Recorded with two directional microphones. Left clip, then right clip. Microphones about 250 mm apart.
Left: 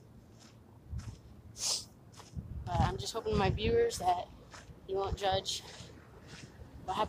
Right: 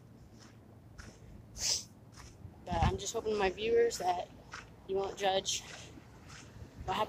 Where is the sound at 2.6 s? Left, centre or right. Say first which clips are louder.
Even; centre.